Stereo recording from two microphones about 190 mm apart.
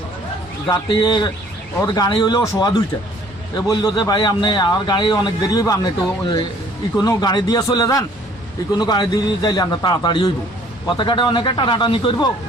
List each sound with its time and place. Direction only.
0.7 s a man's voice: 20° left (ahead or behind)